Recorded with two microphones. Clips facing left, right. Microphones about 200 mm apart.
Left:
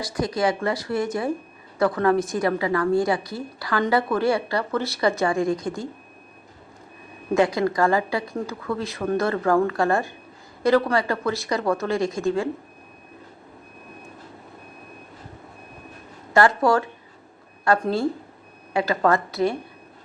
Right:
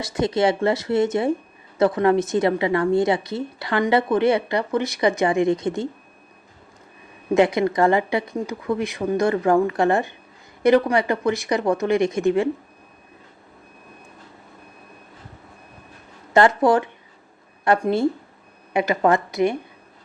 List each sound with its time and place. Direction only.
0.0 s a woman's voice: 25° right (ahead or behind)
7.3 s a woman's voice: 20° right (ahead or behind)
16.3 s a woman's voice: 20° right (ahead or behind)